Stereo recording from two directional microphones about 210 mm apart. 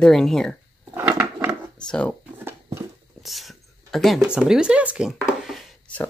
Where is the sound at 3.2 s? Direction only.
Centre (ahead or behind).